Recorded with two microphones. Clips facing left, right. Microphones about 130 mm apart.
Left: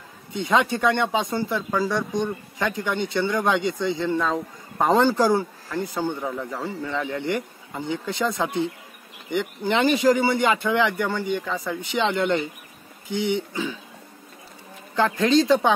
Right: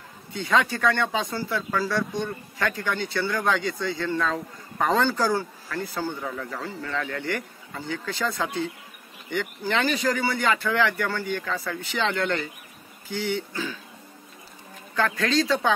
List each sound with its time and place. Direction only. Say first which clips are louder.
0.3 s speech: left 2 dB; 20° left (ahead or behind)
4.7 s speech: left 4 dB; 25° left (ahead or behind)
15.0 s speech: left 5 dB; 25° left (ahead or behind)